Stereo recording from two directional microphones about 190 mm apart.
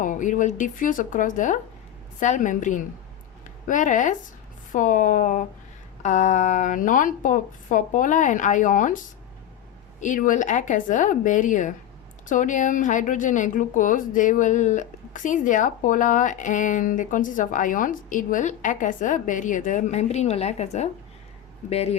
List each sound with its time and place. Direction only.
0.0 s a woman's voice: 40° left (ahead or behind)
10.0 s a woman's voice: 45° left (ahead or behind)